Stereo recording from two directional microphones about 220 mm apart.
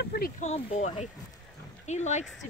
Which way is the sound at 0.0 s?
45° left (ahead or behind).